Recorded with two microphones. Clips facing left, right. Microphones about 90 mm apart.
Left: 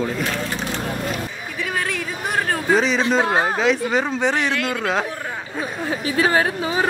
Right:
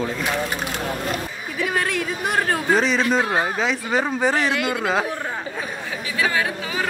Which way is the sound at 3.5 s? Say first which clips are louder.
Left 3 dB; centre (ahead or behind).